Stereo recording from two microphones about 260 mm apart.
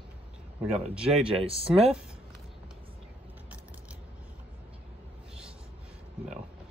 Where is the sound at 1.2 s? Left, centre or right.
Right.